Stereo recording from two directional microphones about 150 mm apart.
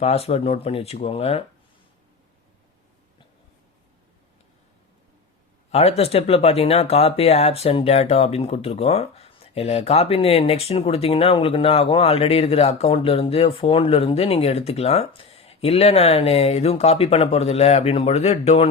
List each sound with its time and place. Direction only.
0.0 s speech: 45° left (ahead or behind)
6.0 s speech: 40° left (ahead or behind)